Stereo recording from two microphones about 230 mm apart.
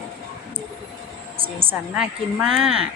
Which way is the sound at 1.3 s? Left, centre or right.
Right.